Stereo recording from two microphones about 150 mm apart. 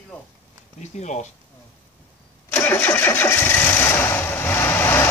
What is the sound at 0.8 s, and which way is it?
Speech, 50° left (ahead or behind).